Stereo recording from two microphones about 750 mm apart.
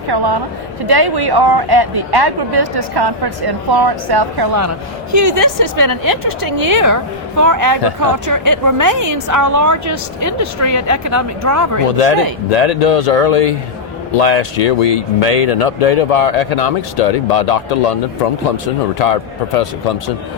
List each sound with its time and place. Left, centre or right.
0.1 s speech: right
11.9 s speech: left
18.9 s speech: left